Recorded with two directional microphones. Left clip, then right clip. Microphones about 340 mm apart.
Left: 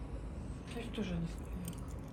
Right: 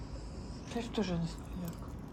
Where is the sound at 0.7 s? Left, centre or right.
Centre.